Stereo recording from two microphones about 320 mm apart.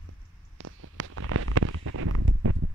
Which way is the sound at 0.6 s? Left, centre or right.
Right.